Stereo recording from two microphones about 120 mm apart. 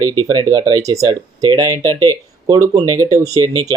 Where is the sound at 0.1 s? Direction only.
35° right (ahead or behind).